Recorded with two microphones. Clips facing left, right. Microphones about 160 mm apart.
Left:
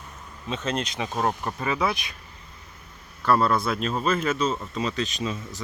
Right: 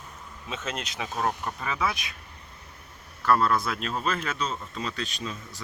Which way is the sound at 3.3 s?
5° left (ahead or behind).